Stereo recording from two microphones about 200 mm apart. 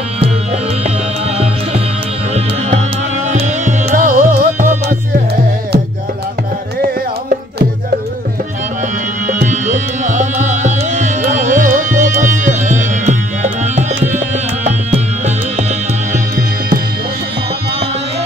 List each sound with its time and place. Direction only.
3.3 s music: 35° right (ahead or behind); by 5.8 s 55° right (ahead or behind)
9.3 s music: 40° right (ahead or behind)